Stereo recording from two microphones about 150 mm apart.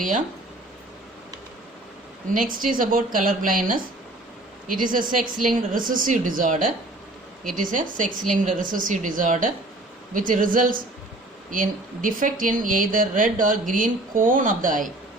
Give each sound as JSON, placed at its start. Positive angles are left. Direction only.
{"t": 2.3, "sound": "speech", "side_deg": -65}